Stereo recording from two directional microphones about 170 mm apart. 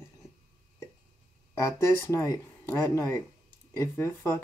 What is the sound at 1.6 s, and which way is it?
Speech, 15° left (ahead or behind).